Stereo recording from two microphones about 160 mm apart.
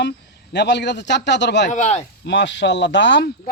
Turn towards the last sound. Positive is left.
turn(degrees=90)